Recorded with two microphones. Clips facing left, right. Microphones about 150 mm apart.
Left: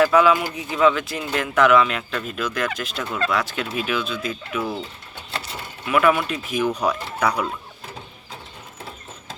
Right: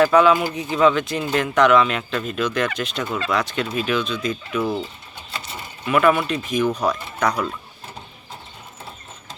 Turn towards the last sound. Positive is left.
turn(degrees=5)  # may be behind; listen again after turning